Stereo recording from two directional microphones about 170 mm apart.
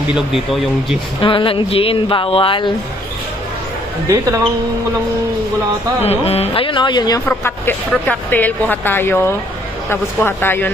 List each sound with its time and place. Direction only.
0.1 s speech: centre (ahead or behind)
1.2 s speech: 30° left (ahead or behind)
6.0 s speech: 35° left (ahead or behind)
7.2 s a woman's voice: 10° left (ahead or behind)